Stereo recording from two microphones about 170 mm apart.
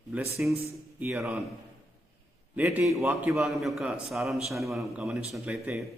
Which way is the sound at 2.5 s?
10° right (ahead or behind).